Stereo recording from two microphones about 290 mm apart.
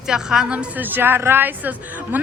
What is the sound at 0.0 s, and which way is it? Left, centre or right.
A woman's voice, centre.